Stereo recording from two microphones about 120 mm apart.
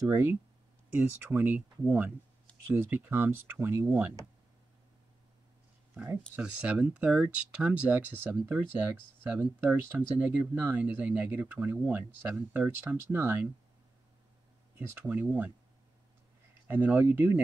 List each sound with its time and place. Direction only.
0.1 s speech: 20° right (ahead or behind)
6.3 s speech: 10° right (ahead or behind)
14.8 s speech: 20° right (ahead or behind)
16.6 s speech: 15° right (ahead or behind)